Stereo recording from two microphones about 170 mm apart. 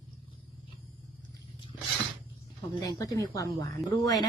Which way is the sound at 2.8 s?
20° left (ahead or behind).